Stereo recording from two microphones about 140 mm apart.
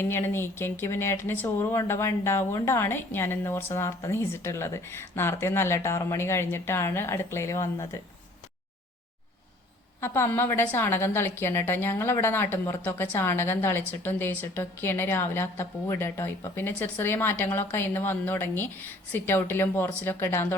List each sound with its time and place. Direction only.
0.0 s speech: 15° left (ahead or behind)
10.0 s speech: 15° left (ahead or behind)